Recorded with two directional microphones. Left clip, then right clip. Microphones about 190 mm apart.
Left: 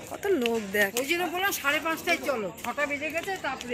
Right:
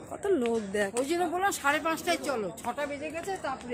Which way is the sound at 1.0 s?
25° right (ahead or behind).